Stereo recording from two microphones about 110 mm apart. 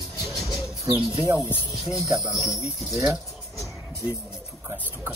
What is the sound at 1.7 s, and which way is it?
Speech, centre (ahead or behind).